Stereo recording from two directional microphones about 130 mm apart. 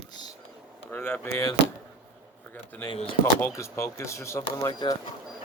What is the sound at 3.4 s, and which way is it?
Speech, 20° left (ahead or behind).